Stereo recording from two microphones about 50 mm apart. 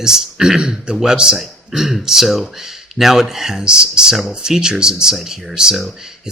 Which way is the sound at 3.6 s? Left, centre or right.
Centre.